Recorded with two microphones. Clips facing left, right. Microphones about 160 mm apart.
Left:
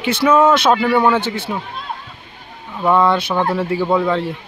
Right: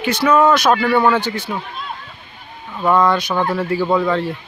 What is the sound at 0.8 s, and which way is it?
Speech, 10° left (ahead or behind).